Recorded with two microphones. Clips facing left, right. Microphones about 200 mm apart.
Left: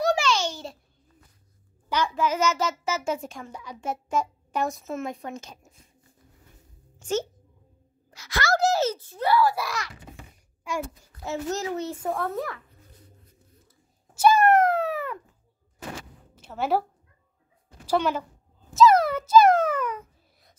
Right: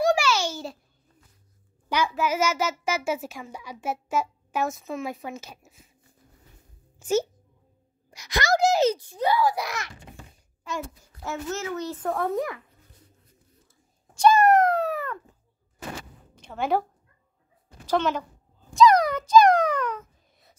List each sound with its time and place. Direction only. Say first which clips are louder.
0.0 s a sound: right 1 dB; 10° right (ahead or behind)
1.9 s a child's voice: even; 10° right (ahead or behind)
7.0 s a child's voice: right 3 dB; 10° right (ahead or behind)
11.4 s a child's voice: left 1 dB; 35° left (ahead or behind)
12.2 s speech: right 3 dB; 15° right (ahead or behind)
14.1 s a sound: right 1 dB; 5° left (ahead or behind)
16.3 s a woman's voice: even; 5° left (ahead or behind)
17.8 s a woman's voice: even; 10° left (ahead or behind)
18.7 s a sound: even; 5° left (ahead or behind)